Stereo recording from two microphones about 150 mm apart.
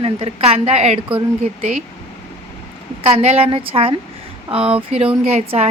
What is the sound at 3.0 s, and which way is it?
A woman's voice, 40° right (ahead or behind).